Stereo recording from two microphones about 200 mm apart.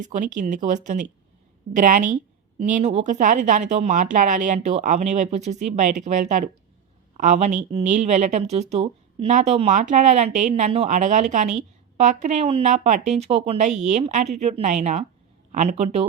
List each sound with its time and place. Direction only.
0.0 s speech: 40° right (ahead or behind)